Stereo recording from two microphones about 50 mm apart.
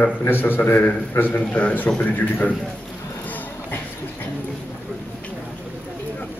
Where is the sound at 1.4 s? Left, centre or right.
Left.